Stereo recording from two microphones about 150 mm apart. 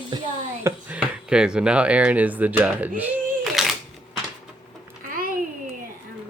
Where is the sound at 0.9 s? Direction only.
5° right (ahead or behind).